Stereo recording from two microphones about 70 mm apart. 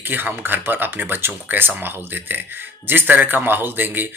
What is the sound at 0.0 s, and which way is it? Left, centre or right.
Speech, right.